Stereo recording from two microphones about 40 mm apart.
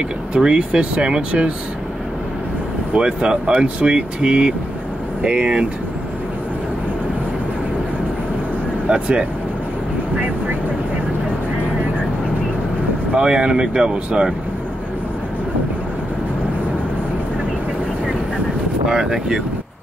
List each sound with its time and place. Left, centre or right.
0.3 s speech: right
3.0 s speech: right
8.8 s speech: right
13.1 s speech: right
18.9 s speech: centre